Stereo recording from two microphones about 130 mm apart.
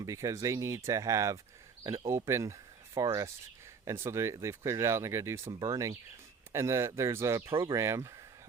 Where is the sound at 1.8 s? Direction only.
35° right (ahead or behind).